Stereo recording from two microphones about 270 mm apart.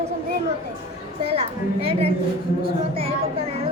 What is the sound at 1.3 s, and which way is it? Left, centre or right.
A woman's voice, right.